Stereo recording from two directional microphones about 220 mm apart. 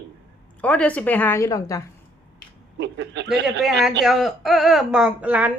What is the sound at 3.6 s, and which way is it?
A woman's voice, centre (ahead or behind).